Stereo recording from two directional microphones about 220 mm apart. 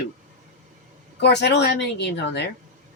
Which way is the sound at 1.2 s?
50° left (ahead or behind).